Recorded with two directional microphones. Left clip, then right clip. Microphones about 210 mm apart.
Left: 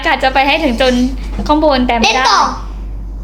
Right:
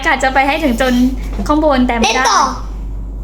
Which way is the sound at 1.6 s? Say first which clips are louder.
Left 1 dB; centre (ahead or behind).